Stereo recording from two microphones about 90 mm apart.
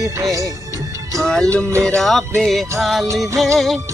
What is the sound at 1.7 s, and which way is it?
Music, 30° right (ahead or behind).